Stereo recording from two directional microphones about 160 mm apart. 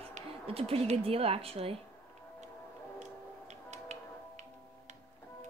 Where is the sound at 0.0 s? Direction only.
40° right (ahead or behind).